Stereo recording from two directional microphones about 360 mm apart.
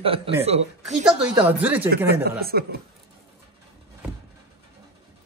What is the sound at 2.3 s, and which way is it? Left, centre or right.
Speech, right.